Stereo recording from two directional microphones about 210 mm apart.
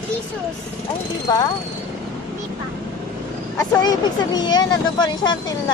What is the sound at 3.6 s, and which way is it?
Speech, 15° left (ahead or behind).